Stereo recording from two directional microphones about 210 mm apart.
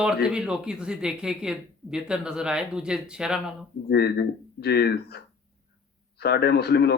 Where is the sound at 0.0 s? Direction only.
5° right (ahead or behind).